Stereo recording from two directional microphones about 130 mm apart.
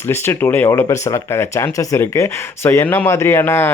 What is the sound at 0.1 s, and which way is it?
Speech, 20° left (ahead or behind).